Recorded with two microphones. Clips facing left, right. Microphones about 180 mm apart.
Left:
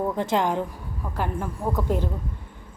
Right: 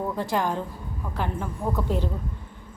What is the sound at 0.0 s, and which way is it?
Speech, 20° left (ahead or behind).